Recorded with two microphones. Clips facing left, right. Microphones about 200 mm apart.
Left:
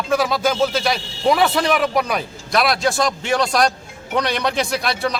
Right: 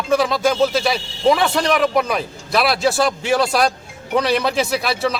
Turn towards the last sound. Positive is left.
turn(degrees=-5)  # may be behind; listen again after turning